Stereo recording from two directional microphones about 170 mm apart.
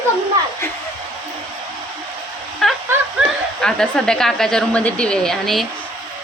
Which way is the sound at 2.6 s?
Centre (ahead or behind).